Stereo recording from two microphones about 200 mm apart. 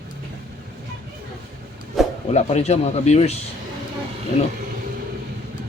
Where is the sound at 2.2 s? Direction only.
30° left (ahead or behind).